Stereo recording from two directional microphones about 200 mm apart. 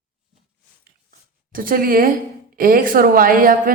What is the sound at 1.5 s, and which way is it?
A woman's voice, 45° right (ahead or behind).